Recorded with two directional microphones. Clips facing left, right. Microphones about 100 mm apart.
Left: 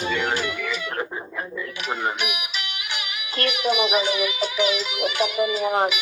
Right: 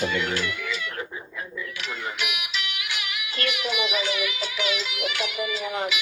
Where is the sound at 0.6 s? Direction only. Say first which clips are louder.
Left 4 dB; 60° left (ahead or behind).